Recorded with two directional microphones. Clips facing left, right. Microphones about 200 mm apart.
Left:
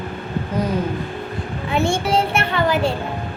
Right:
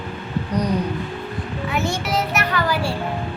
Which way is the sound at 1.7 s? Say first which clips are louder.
Left 5 dB; 30° left (ahead or behind).